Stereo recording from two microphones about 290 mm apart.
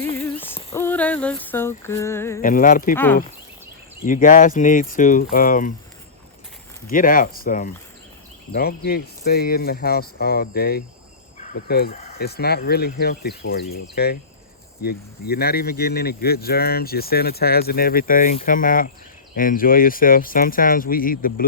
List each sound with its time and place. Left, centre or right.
0.0 s a sound: centre
2.4 s speech: left
2.9 s speech: centre
4.0 s speech: left
6.9 s speech: left